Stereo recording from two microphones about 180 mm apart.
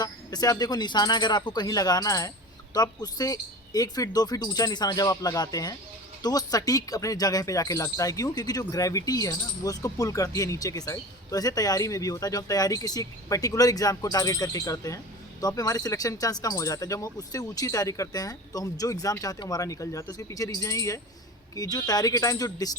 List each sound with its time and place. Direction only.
0.0 s speech: 20° left (ahead or behind)